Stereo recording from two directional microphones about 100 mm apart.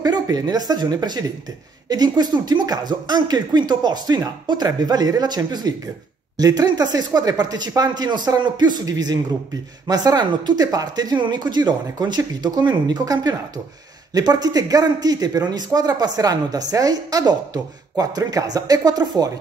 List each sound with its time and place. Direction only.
0.0 s a woman's voice: 40° right (ahead or behind)